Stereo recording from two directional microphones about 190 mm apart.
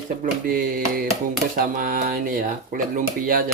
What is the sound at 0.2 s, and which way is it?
Speech, 45° right (ahead or behind).